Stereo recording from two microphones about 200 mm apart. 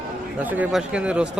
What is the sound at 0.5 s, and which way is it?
Speech, 5° right (ahead or behind).